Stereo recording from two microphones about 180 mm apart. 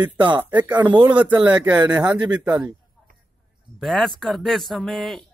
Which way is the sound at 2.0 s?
25° right (ahead or behind).